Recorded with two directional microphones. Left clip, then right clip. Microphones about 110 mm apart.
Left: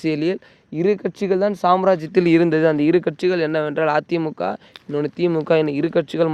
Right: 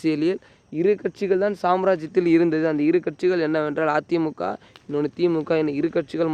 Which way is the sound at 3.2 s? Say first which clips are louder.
Left 2 dB; 25° left (ahead or behind).